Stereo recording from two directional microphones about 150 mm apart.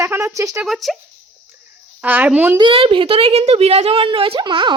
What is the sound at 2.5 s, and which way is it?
A woman's voice, 35° right (ahead or behind).